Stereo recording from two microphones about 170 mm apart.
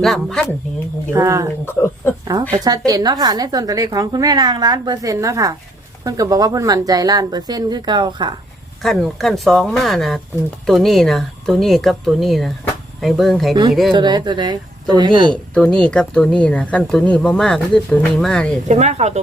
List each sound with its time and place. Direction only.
0.0 s speech: centre (ahead or behind)
1.1 s a woman's voice: 20° right (ahead or behind)
1.6 s speech: 15° left (ahead or behind)
2.5 s a woman's voice: 20° right (ahead or behind)
8.8 s speech: centre (ahead or behind)
13.9 s a woman's voice: 25° right (ahead or behind)
15.5 s speech: 5° left (ahead or behind)
18.7 s speech: 40° right (ahead or behind)